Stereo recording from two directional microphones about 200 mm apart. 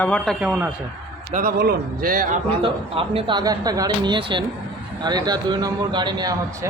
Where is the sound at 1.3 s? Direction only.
50° right (ahead or behind).